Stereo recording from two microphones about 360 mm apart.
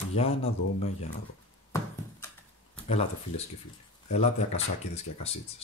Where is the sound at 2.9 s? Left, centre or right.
Centre.